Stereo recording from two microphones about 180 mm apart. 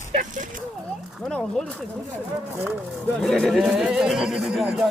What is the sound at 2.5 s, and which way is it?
Speech, 10° right (ahead or behind).